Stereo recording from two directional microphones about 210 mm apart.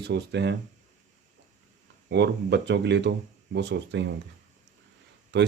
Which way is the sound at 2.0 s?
55° right (ahead or behind).